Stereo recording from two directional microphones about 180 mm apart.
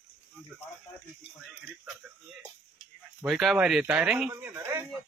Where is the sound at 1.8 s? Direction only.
5° right (ahead or behind).